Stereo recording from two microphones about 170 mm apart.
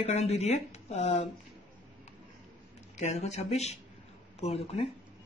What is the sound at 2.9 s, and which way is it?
Speech, 40° left (ahead or behind).